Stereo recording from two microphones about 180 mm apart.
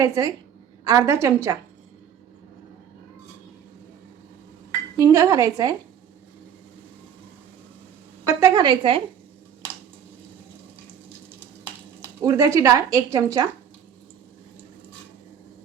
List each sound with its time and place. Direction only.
0.0 s a woman's voice: 20° right (ahead or behind)
4.9 s speech: 15° right (ahead or behind)
8.3 s a woman's voice: 15° right (ahead or behind)
12.0 s speech: 20° right (ahead or behind)